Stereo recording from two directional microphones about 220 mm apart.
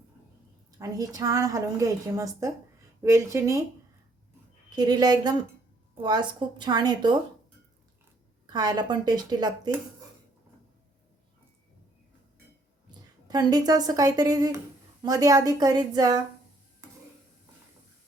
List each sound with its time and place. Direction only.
0.8 s a woman's voice: 15° right (ahead or behind)
4.7 s a woman's voice: 20° right (ahead or behind)
8.5 s a woman's voice: 20° right (ahead or behind)
13.2 s a woman's voice: 20° right (ahead or behind)